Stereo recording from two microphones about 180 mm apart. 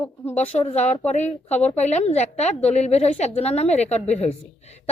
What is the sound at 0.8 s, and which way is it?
A woman's voice, 40° left (ahead or behind).